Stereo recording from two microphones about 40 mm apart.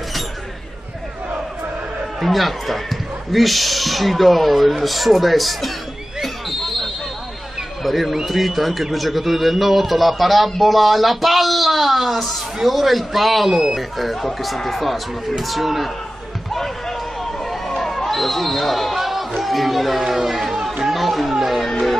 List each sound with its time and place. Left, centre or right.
2.1 s a man's voice: centre
6.2 s a sound: centre
7.8 s a man's voice: centre
17.2 s basketball bounce: centre
20.8 s music: centre